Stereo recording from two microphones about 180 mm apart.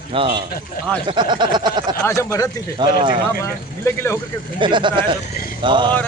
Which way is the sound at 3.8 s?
15° left (ahead or behind).